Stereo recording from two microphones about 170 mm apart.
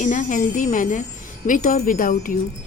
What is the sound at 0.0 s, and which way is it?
A woman's voice, 50° left (ahead or behind).